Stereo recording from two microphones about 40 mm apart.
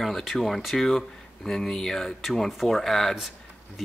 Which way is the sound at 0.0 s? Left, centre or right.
Centre.